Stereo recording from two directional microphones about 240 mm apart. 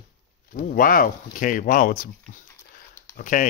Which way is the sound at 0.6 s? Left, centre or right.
Left.